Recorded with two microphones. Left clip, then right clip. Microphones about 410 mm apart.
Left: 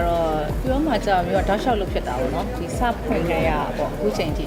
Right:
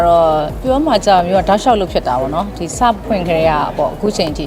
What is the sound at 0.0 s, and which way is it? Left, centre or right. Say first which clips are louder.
A woman's voice: right 11 dB; right.